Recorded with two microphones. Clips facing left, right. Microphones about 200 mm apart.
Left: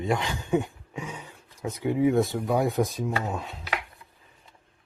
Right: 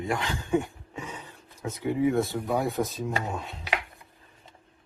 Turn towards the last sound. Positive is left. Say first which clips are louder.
# left 1 dB
turn(degrees=5)  # may be behind; listen again after turning